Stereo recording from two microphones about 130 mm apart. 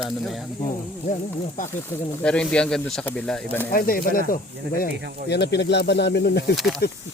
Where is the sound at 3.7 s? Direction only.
90° left.